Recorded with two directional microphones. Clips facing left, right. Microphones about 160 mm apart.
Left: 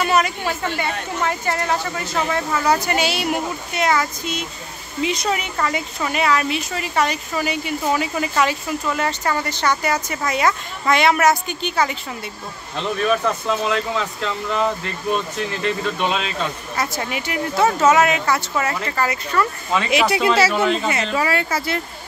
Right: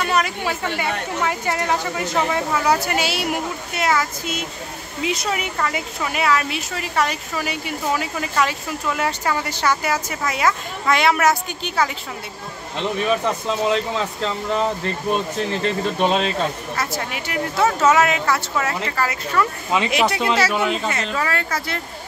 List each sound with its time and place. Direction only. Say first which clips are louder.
0.0 s a woman's voice: left 2 dB; centre (ahead or behind)
12.9 s speech: left 2 dB; 20° right (ahead or behind); by 16.3 s 35° right (ahead or behind)
16.7 s a woman's voice: left 1 dB; centre (ahead or behind)
20.9 s speech: left 3 dB; 10° left (ahead or behind)